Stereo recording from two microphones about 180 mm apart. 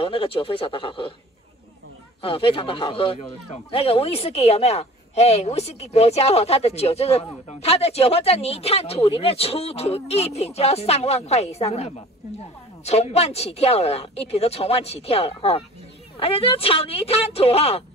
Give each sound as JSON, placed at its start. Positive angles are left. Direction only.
{"t": 0.0, "sound": "speech", "side_deg": 30}
{"t": 2.2, "sound": "speech", "side_deg": 30}